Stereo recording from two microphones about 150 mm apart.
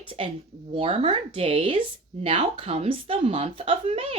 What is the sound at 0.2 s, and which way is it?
A woman's voice, 40° right (ahead or behind).